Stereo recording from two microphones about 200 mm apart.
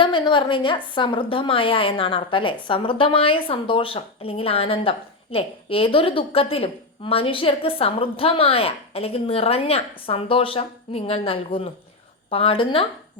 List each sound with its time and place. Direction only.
0.0 s a woman's voice: 25° left (ahead or behind)